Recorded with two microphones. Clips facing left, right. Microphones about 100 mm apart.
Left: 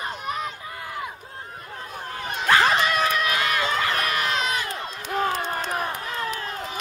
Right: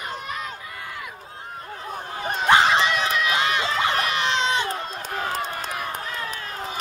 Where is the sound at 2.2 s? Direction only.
35° right (ahead or behind).